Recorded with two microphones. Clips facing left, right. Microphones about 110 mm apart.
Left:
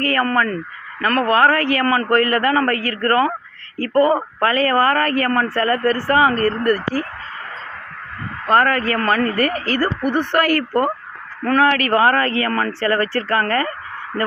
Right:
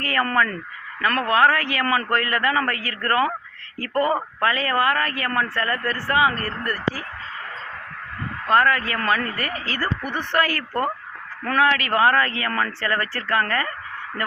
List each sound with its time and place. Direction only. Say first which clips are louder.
0.1 s a man's voice: even; 35° left (ahead or behind)
4.4 s a man's voice: left 5 dB; 50° left (ahead or behind)
8.4 s a man's voice: left 3 dB; 50° left (ahead or behind)
10.0 s a man's voice: left 4 dB; 45° left (ahead or behind)